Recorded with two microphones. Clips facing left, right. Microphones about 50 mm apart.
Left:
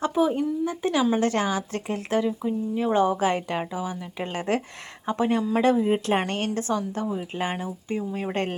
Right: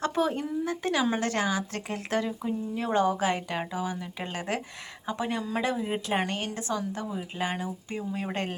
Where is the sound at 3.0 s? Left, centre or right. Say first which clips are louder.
Left 2 dB; left.